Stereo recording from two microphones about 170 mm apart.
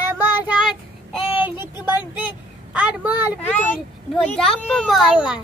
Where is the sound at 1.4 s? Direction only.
10° right (ahead or behind).